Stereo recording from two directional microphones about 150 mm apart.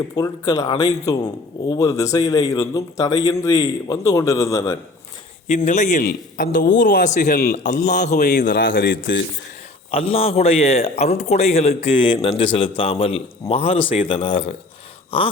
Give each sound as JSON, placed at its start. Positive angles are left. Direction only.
{"t": 0.2, "sound": "speech", "side_deg": 25}
{"t": 5.5, "sound": "speech", "side_deg": 55}
{"t": 7.5, "sound": "a man's voice", "side_deg": 55}
{"t": 8.2, "sound": "a man's voice", "side_deg": 90}
{"t": 9.9, "sound": "a man's voice", "side_deg": 40}
{"t": 11.9, "sound": "a man's voice", "side_deg": 35}